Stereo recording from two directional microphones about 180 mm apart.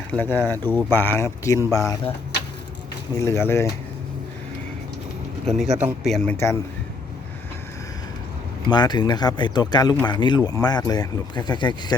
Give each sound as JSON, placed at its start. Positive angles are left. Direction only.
{"t": 0.1, "sound": "speech", "side_deg": 10}
{"t": 3.2, "sound": "speech", "side_deg": 15}
{"t": 5.5, "sound": "a man's voice", "side_deg": 0}
{"t": 6.3, "sound": "speech", "side_deg": 15}
{"t": 8.7, "sound": "speech", "side_deg": 25}